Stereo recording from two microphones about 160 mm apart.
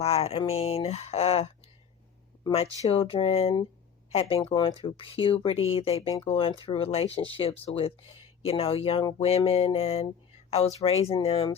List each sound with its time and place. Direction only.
0.0 s speech: 40° left (ahead or behind)
2.9 s speech: 35° left (ahead or behind)